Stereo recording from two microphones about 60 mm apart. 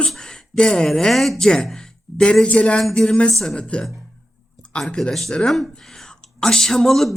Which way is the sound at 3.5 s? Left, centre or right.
Centre.